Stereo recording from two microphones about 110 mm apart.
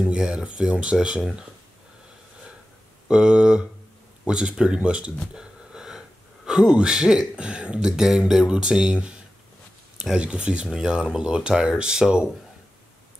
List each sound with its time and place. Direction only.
0.0 s speech: 5° right (ahead or behind)
3.1 s speech: 5° right (ahead or behind)